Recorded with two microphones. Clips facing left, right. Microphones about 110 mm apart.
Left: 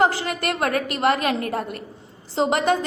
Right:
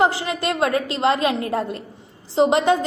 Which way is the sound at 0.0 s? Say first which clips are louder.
Right 1 dB; 20° right (ahead or behind).